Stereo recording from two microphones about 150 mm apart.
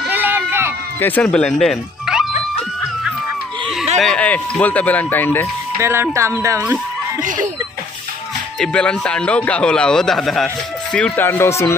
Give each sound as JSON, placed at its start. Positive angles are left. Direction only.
{"t": 0.1, "sound": "run", "side_deg": -15}
{"t": 1.0, "sound": "speech", "side_deg": 10}
{"t": 4.0, "sound": "speech", "side_deg": 5}
{"t": 5.8, "sound": "speech", "side_deg": -15}
{"t": 8.5, "sound": "speech", "side_deg": 5}